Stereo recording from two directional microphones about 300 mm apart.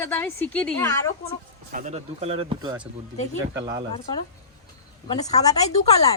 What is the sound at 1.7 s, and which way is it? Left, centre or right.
Speech, right.